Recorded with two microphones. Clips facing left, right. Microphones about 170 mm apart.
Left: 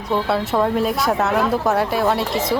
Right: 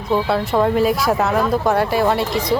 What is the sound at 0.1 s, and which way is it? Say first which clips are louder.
Speech: right 2 dB; centre (ahead or behind).